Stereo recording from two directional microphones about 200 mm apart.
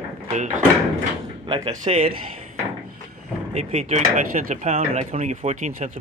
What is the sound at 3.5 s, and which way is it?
Speech, 35° right (ahead or behind).